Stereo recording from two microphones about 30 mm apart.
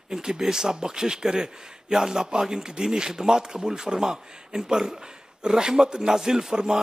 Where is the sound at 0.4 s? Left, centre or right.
Centre.